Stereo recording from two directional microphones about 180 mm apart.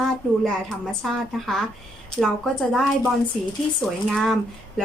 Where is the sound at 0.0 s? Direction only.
5° left (ahead or behind).